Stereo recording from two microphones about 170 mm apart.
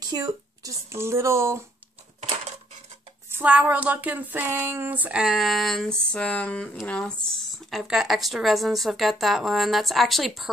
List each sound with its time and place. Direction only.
0.0 s speech: 25° right (ahead or behind)
3.3 s a sound: 10° right (ahead or behind); by 7.2 s 5° left (ahead or behind)
7.7 s speech: centre (ahead or behind)